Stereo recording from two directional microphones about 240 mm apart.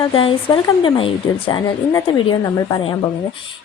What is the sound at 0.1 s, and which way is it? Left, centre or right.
A woman's voice, left.